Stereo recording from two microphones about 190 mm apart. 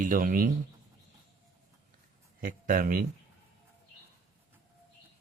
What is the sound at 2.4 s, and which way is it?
Speech, 45° right (ahead or behind).